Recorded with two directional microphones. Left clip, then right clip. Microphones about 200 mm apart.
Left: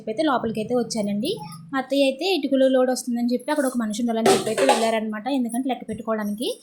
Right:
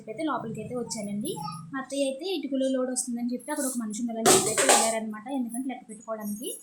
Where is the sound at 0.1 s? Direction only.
25° left (ahead or behind).